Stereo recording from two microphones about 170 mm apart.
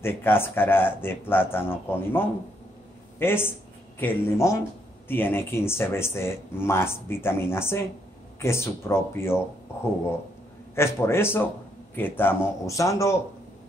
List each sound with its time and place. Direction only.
0.0 s speech: 15° left (ahead or behind)
10.7 s speech: 15° left (ahead or behind)